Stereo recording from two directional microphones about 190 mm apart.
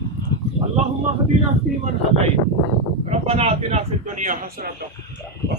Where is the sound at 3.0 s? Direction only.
30° right (ahead or behind).